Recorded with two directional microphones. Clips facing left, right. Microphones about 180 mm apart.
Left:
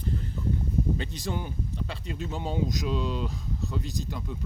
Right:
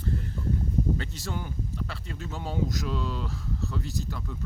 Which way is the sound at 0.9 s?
20° left (ahead or behind).